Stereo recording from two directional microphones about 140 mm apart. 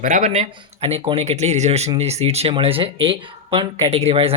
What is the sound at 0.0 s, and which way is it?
Speech, 75° right (ahead or behind).